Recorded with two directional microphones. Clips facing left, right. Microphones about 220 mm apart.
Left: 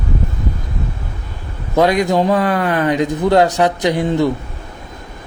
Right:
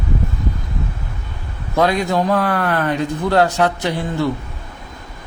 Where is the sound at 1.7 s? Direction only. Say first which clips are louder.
Left 3 dB; 20° left (ahead or behind).